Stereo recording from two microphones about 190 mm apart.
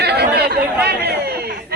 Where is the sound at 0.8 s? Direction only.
60° right (ahead or behind).